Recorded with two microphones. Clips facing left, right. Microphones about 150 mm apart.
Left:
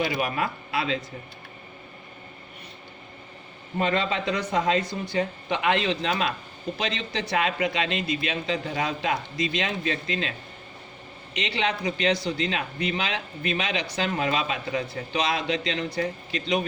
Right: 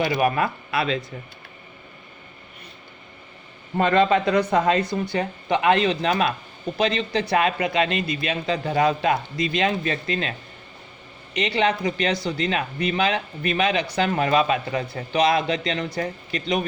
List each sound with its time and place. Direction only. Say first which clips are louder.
0.2 s speech: right 6 dB; 55° right (ahead or behind)
3.8 s speech: right 7 dB; 55° right (ahead or behind)
11.3 s speech: right 6 dB; 55° right (ahead or behind)